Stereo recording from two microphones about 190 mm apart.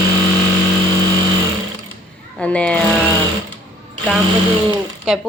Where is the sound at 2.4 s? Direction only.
5° left (ahead or behind).